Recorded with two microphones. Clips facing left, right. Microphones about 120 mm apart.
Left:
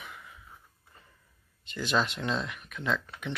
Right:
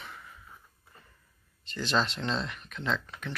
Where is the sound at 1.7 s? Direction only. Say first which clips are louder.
Even; 10° left (ahead or behind).